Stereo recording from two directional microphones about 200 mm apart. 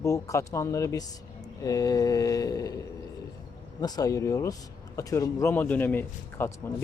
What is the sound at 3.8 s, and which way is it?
A man's voice, 20° left (ahead or behind).